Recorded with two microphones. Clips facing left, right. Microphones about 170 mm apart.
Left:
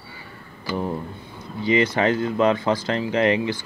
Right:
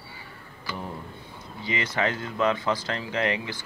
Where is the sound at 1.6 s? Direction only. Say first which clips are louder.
Left 8 dB; 30° left (ahead or behind).